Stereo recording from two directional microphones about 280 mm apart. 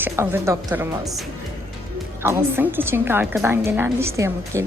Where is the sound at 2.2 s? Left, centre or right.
Centre.